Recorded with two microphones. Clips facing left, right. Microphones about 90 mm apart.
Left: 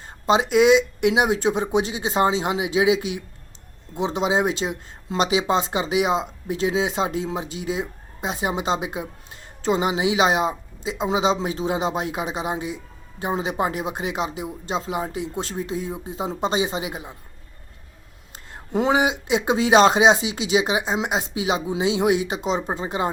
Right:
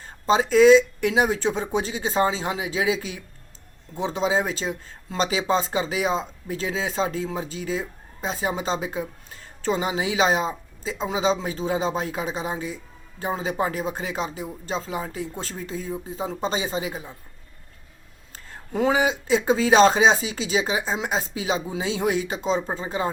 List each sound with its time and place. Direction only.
0.3 s speech: 15° left (ahead or behind)
18.5 s speech: 20° left (ahead or behind)